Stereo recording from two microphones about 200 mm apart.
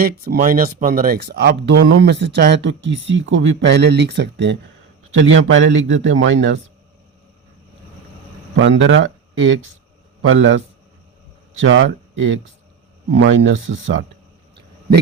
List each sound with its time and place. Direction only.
0.0 s speech: 45° right (ahead or behind)
5.1 s a man's voice: 70° right (ahead or behind)
8.5 s a man's voice: 70° right (ahead or behind)
11.6 s a man's voice: 80° right